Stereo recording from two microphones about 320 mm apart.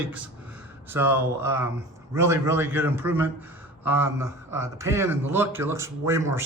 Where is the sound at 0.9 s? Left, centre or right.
Centre.